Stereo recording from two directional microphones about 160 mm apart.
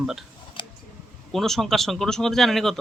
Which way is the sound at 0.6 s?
30° left (ahead or behind).